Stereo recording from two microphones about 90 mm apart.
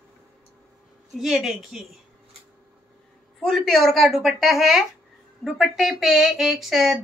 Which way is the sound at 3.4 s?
5° left (ahead or behind).